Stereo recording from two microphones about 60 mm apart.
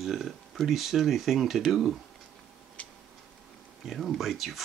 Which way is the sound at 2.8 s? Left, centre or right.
Left.